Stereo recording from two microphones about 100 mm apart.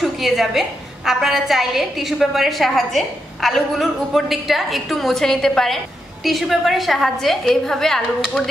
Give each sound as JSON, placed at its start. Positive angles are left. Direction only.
{"t": 0.0, "sound": "a woman's voice", "side_deg": 0}